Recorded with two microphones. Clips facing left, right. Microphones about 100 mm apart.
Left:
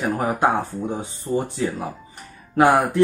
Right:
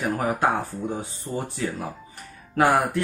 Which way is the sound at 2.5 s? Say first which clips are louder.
Left 4 dB; 20° left (ahead or behind).